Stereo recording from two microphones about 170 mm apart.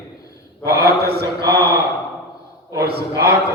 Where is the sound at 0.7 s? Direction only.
70° right (ahead or behind).